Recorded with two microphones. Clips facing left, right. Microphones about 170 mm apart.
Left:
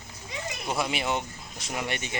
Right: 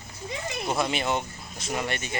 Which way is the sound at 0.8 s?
10° left (ahead or behind).